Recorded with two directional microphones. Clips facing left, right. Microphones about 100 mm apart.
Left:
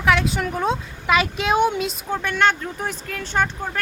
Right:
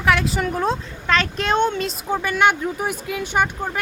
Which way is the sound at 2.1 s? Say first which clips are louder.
Right 2 dB; 5° right (ahead or behind).